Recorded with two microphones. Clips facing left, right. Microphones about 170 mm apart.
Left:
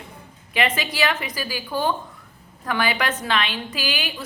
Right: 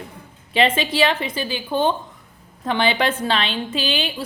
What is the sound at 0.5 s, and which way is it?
A woman's voice, 25° right (ahead or behind).